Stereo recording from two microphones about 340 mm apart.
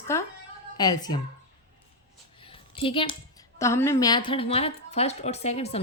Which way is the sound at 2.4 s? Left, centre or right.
Centre.